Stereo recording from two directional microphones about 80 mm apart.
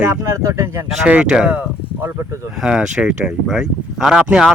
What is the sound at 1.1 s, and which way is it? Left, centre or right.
Speech, centre.